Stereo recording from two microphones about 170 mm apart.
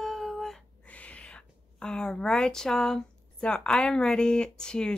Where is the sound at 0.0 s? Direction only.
Centre (ahead or behind).